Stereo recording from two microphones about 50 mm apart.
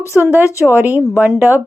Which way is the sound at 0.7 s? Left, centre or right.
Right.